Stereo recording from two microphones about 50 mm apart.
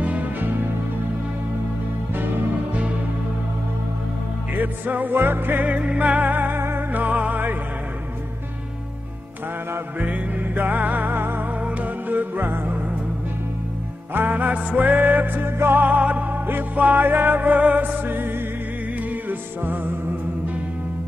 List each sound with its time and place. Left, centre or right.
0.0 s music: right
4.6 s music: right
5.6 s music: right
9.9 s music: right
14.1 s music: right
15.8 s music: right
18.0 s music: right